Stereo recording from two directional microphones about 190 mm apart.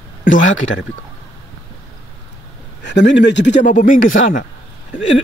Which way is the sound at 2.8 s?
65° left (ahead or behind).